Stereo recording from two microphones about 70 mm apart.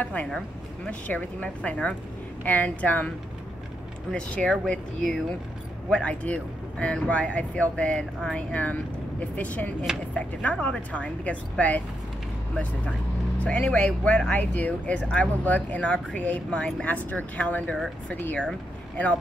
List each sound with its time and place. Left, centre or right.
0.0 s speech: centre
4.1 s speech: centre
8.5 s speech: left
13.4 s speech: left